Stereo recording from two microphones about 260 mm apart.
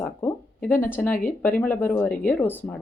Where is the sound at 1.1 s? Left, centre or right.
Left.